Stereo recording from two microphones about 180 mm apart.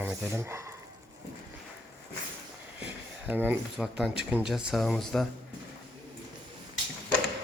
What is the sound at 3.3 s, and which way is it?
Speech, 10° right (ahead or behind).